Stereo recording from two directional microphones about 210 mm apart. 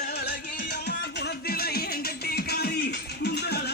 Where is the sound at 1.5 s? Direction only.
45° left (ahead or behind).